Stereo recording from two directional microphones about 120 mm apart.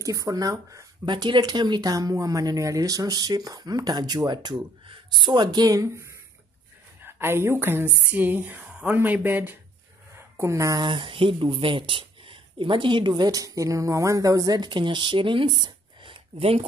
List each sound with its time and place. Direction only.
0.0 s speech: 30° right (ahead or behind)
1.1 s speech: 40° right (ahead or behind)
10.9 s speech: 45° right (ahead or behind)